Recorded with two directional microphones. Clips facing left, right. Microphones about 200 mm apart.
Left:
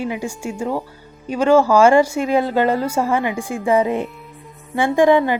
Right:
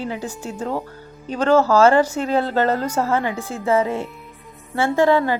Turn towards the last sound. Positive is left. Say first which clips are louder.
# left 3 dB
turn(degrees=15)  # may be behind; listen again after turning